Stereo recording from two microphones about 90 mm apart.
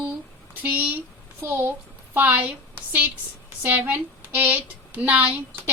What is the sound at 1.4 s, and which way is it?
Speech, 30° right (ahead or behind).